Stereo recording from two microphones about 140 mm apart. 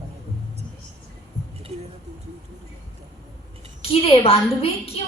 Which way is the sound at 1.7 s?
50° right (ahead or behind).